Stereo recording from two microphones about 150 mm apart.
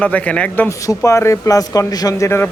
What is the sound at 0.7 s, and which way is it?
Speech, 20° left (ahead or behind).